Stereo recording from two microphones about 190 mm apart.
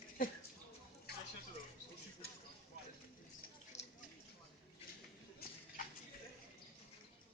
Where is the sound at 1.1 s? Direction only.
55° left (ahead or behind).